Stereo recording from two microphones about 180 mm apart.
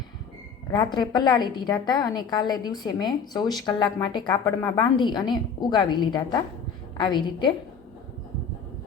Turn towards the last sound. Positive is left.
turn(degrees=25)  # may be behind; listen again after turning